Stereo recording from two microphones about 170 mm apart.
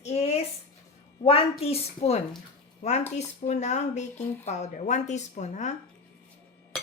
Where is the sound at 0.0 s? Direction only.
40° left (ahead or behind).